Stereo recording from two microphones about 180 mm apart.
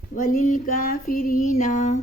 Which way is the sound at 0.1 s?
45° left (ahead or behind).